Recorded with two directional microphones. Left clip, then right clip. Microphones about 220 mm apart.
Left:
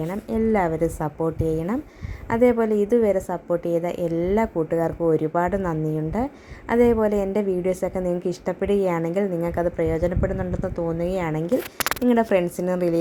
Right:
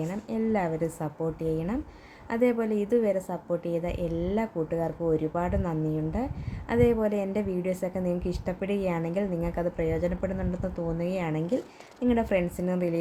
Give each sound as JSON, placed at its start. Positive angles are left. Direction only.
{"t": 0.0, "sound": "a woman's voice", "side_deg": 15}